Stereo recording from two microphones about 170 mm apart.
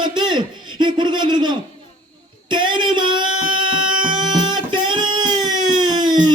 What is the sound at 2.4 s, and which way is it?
Music, 25° right (ahead or behind).